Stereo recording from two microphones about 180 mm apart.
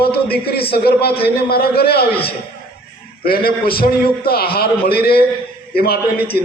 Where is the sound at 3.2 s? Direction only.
55° left (ahead or behind).